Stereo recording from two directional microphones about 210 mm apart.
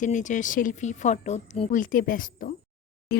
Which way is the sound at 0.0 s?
35° left (ahead or behind).